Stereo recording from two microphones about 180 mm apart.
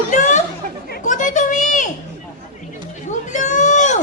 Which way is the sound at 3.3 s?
40° left (ahead or behind).